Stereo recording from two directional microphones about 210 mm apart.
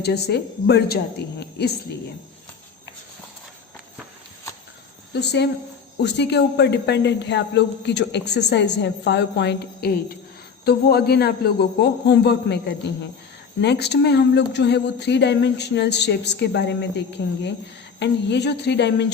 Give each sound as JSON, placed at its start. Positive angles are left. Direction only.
{"t": 0.0, "sound": "speech", "side_deg": 50}
{"t": 5.1, "sound": "speech", "side_deg": 55}